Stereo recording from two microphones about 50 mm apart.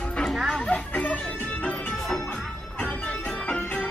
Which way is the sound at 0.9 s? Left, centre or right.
Left.